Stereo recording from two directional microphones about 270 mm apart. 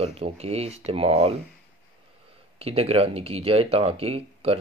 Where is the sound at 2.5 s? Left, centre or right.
Right.